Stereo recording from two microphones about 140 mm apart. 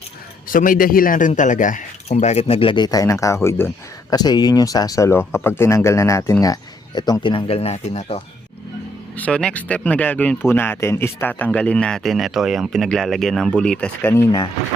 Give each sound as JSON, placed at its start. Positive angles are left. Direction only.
{"t": 0.5, "sound": "a man's voice", "side_deg": 75}
{"t": 1.3, "sound": "speech", "side_deg": 65}
{"t": 4.1, "sound": "speech", "side_deg": 30}
{"t": 9.1, "sound": "speech", "side_deg": 10}
{"t": 14.3, "sound": "speech", "side_deg": 30}